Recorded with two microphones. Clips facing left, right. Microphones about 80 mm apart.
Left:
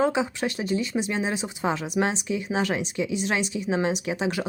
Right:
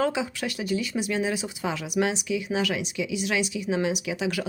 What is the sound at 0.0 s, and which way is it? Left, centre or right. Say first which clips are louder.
Speech: left 3 dB; left.